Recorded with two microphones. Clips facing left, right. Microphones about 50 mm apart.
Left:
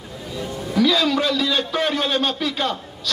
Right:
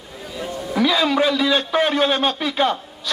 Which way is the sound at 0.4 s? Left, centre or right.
Centre.